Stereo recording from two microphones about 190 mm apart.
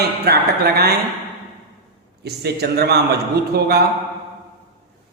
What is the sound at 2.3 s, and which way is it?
A man's voice, 60° right (ahead or behind).